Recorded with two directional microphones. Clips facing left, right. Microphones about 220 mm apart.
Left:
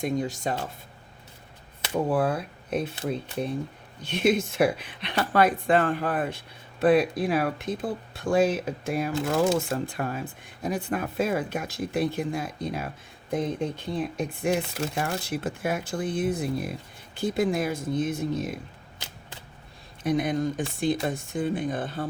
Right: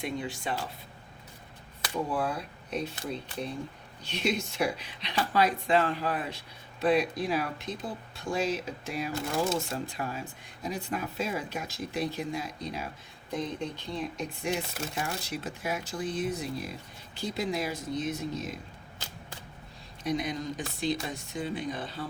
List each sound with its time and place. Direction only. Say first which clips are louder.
0.0 s speech: left 6 dB; 45° left (ahead or behind)
2.0 s speech: left 9 dB; 55° left (ahead or behind)
20.0 s speech: left 6 dB; 55° left (ahead or behind)